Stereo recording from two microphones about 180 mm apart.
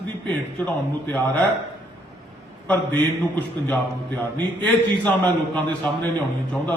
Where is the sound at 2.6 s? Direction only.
10° left (ahead or behind).